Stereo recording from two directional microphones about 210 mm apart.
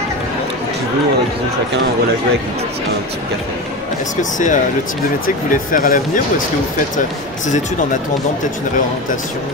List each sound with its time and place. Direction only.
4.2 s speech: 35° left (ahead or behind)